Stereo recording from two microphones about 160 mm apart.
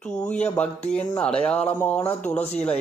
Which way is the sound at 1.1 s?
5° left (ahead or behind).